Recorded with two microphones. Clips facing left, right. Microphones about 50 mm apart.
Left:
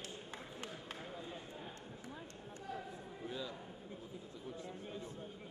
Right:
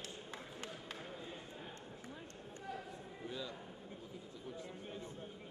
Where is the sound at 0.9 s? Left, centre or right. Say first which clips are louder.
Left 1 dB; centre.